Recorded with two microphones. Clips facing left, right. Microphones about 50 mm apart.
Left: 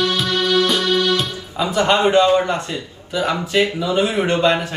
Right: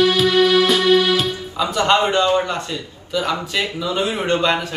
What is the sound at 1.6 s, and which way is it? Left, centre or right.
A man's voice, left.